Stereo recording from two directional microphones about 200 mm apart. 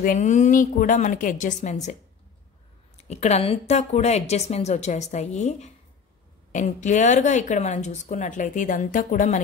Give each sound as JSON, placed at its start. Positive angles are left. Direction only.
{"t": 0.0, "sound": "speech", "side_deg": 40}
{"t": 3.1, "sound": "speech", "side_deg": 35}